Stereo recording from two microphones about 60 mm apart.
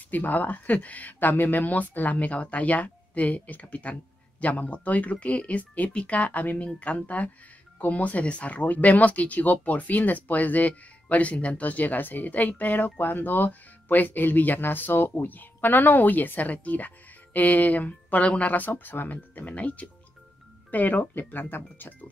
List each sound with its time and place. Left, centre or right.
0.1 s speech: left